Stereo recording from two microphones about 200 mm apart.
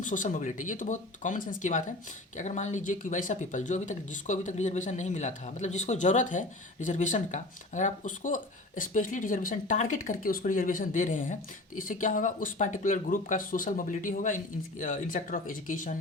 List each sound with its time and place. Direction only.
0.0 s speech: 40° left (ahead or behind)